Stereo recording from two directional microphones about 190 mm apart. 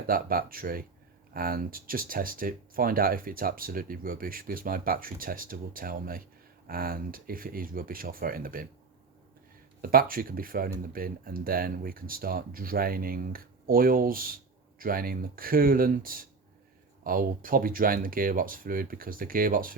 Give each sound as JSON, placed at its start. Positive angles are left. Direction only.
{"t": 0.1, "sound": "speech", "side_deg": -50}
{"t": 9.8, "sound": "speech", "side_deg": -50}